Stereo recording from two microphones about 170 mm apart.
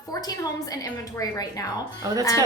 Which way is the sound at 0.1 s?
20° left (ahead or behind).